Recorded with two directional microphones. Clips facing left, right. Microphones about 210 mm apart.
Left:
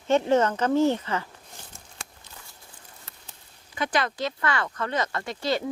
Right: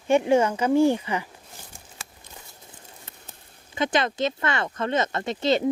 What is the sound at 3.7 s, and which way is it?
Speech, 25° right (ahead or behind).